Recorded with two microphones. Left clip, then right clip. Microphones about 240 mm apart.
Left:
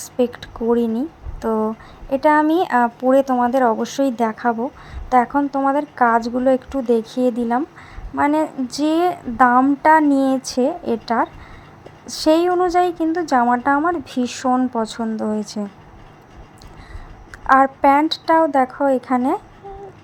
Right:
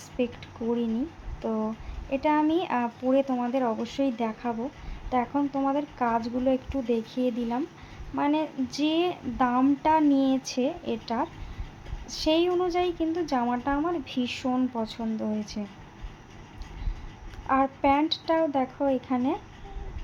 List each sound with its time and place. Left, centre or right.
0.0 s speech: left
17.4 s speech: left